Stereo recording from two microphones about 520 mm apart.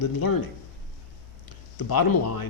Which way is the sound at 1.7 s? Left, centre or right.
Left.